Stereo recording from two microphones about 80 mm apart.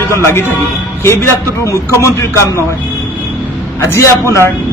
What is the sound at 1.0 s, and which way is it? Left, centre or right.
A man's voice, left.